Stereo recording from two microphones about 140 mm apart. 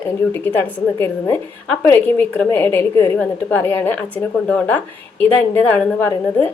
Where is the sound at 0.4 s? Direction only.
15° left (ahead or behind).